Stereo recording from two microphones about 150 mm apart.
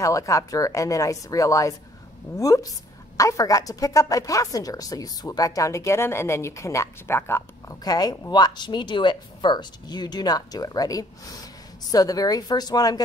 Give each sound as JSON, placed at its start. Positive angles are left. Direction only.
{"t": 0.0, "sound": "speech", "side_deg": 20}